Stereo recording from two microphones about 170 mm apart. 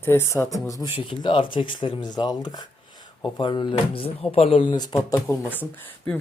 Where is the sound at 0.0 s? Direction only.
15° left (ahead or behind).